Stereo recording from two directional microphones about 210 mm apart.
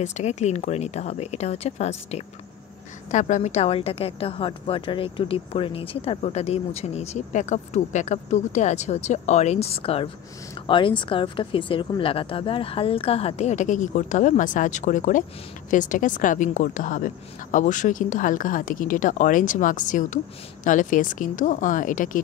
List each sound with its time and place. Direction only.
0.0 s a woman's voice: 35° left (ahead or behind)